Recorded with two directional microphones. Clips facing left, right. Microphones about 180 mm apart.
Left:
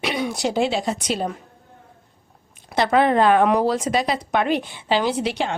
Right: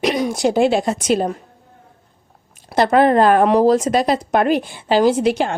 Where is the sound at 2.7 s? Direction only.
45° right (ahead or behind).